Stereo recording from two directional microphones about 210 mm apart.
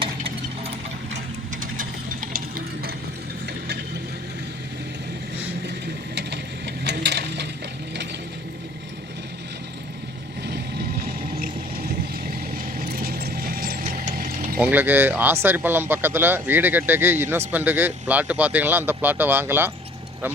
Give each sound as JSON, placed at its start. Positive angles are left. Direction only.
{"t": 1.8, "sound": "mechanisms", "side_deg": -40}
{"t": 6.8, "sound": "coin", "side_deg": -55}
{"t": 10.4, "sound": "vehicle", "side_deg": -50}
{"t": 12.3, "sound": "a sound", "side_deg": -40}
{"t": 14.6, "sound": "speech", "side_deg": -10}